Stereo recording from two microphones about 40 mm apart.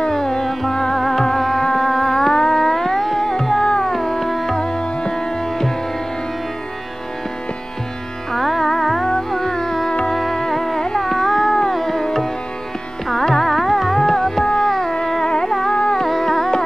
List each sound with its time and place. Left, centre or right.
0.1 s music: centre
4.6 s music: centre
8.3 s music: centre
13.1 s carnatic music: centre
14.7 s music: centre
15.7 s music: left
16.0 s music: centre